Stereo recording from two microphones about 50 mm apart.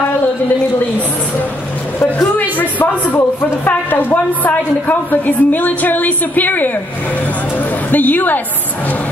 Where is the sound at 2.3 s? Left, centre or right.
Left.